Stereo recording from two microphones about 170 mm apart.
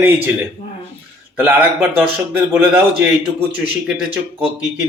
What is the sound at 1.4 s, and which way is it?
A man's voice, 10° right (ahead or behind).